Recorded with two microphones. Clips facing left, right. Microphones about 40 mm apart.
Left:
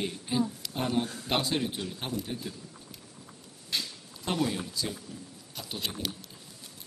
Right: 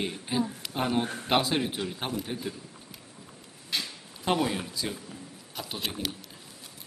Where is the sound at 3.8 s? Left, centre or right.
Right.